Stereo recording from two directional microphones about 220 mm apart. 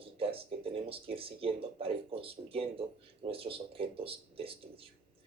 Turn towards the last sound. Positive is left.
turn(degrees=-25)  # may be behind; listen again after turning